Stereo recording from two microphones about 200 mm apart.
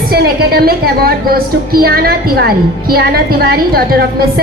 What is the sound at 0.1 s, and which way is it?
A woman's voice, 50° right (ahead or behind).